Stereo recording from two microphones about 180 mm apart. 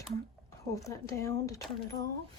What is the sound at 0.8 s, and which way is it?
Speech, 15° left (ahead or behind).